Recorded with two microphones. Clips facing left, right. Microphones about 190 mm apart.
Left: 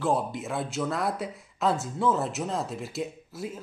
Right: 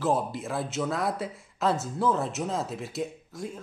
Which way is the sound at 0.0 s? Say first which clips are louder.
Even; centre (ahead or behind).